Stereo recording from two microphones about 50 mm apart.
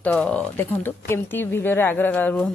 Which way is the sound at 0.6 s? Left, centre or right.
Left.